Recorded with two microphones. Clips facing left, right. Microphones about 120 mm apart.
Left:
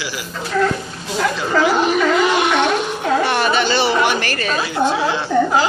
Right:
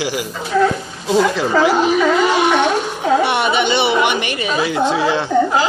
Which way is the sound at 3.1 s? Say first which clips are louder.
Right 2 dB; 20° right (ahead or behind).